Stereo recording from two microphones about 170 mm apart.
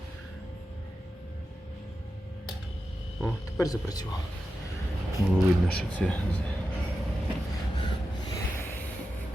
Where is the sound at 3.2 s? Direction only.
20° left (ahead or behind).